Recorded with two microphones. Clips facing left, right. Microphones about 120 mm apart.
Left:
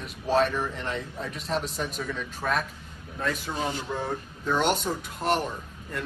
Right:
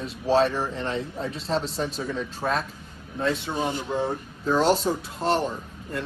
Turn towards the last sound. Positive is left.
turn(degrees=-30)  # may be behind; listen again after turning